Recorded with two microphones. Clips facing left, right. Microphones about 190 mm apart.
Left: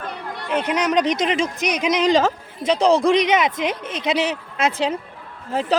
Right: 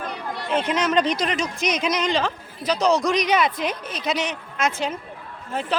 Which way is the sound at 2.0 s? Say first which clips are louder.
Left 10 dB; 40° left (ahead or behind).